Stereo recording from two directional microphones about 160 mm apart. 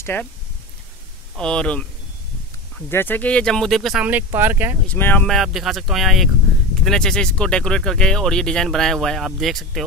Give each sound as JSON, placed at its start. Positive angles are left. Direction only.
{"t": 0.0, "sound": "speech", "side_deg": 10}
{"t": 1.3, "sound": "speech", "side_deg": 5}
{"t": 2.9, "sound": "speech", "side_deg": 15}
{"t": 4.8, "sound": "speech", "side_deg": 10}